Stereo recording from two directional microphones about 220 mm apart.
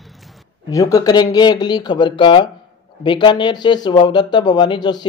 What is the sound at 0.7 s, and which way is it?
Speech, 15° left (ahead or behind).